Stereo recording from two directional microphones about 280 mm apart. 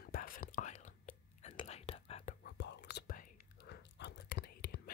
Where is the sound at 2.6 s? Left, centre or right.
Left.